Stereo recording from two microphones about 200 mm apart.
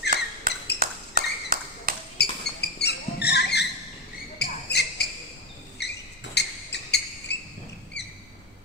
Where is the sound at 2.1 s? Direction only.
55° left (ahead or behind).